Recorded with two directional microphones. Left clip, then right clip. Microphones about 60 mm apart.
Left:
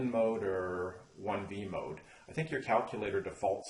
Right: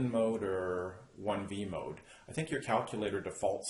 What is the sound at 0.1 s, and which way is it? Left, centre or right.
Speech, right.